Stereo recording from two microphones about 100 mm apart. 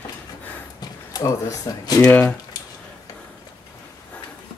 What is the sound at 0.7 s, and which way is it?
Speech, 40° left (ahead or behind).